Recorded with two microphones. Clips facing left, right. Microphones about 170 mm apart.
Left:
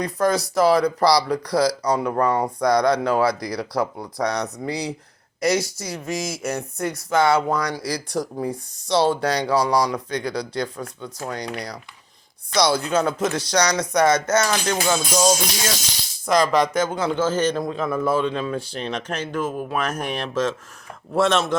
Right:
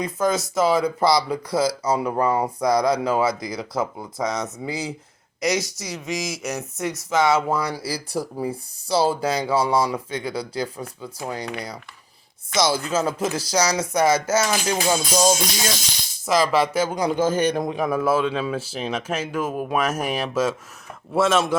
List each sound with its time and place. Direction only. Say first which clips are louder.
0.0 s a man's voice: left 1 dB; centre (ahead or behind); by 15.3 s 15° right (ahead or behind)
16.2 s a man's voice: left 1 dB; 5° right (ahead or behind)